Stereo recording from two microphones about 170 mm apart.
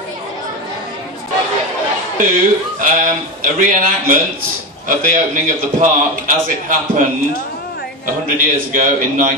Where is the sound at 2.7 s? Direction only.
50° right (ahead or behind).